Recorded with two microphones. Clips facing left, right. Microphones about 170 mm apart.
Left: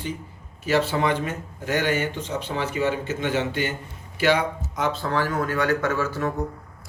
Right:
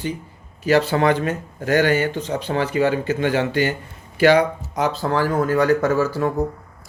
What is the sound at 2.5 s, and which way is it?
Speech, 90° right.